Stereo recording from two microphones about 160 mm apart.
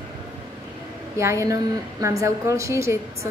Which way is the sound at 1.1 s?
15° right (ahead or behind).